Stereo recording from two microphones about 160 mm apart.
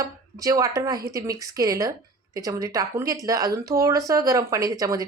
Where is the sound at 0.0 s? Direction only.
20° right (ahead or behind).